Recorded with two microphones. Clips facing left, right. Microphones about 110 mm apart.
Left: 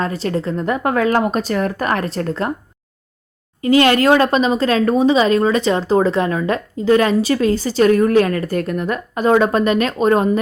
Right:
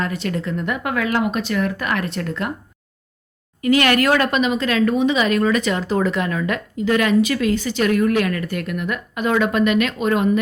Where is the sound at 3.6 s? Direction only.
30° left (ahead or behind).